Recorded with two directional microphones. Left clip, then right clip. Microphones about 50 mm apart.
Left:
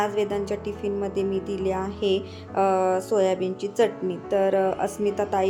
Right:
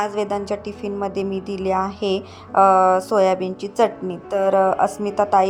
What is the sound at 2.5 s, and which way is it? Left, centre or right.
A woman's voice, right.